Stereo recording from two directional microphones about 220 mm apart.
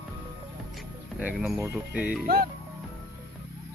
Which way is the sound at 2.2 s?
40° right (ahead or behind).